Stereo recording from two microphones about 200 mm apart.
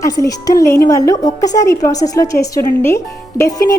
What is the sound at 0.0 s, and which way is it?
A woman's voice, 15° left (ahead or behind).